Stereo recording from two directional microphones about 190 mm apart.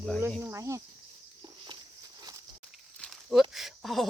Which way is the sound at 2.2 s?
20° right (ahead or behind).